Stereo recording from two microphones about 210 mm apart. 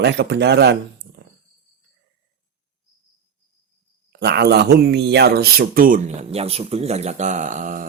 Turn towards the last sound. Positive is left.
turn(degrees=-40)  # may be behind; listen again after turning